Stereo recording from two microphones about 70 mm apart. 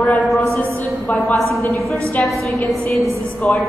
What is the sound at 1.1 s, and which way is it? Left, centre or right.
Speech, left.